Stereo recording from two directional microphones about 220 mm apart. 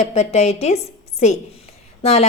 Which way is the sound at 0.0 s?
30° left (ahead or behind).